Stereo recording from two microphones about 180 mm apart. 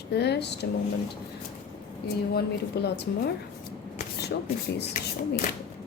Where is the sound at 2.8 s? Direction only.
65° left (ahead or behind).